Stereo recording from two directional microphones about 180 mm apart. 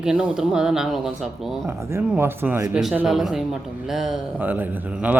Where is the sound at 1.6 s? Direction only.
15° right (ahead or behind).